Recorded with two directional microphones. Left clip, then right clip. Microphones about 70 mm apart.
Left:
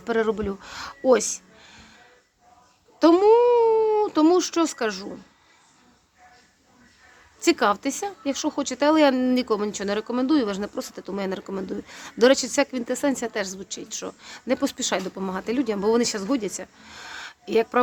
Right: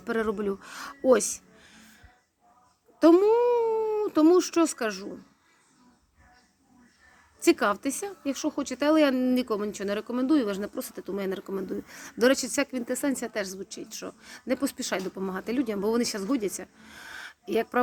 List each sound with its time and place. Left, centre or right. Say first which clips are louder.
0.0 s speech: left 5 dB; centre
1.3 s a sound: left 5 dB; centre
3.0 s speech: left 4 dB; centre
7.3 s a woman's voice: left 3 dB; centre
16.2 s speech: left 3 dB; centre